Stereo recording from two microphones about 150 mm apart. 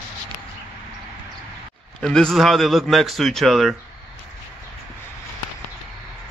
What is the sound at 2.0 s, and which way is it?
A man's voice, 5° left (ahead or behind).